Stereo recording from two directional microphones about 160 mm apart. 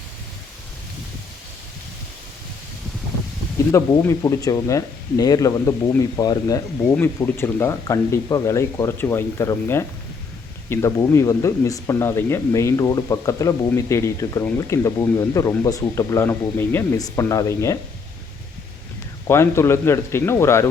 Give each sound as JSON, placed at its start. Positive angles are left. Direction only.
{"t": 3.7, "sound": "speech", "side_deg": 20}
{"t": 6.9, "sound": "speech", "side_deg": 15}
{"t": 19.3, "sound": "speech", "side_deg": 15}